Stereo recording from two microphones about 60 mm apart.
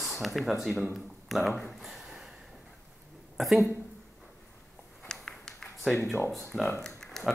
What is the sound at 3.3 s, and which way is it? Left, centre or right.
Speech, centre.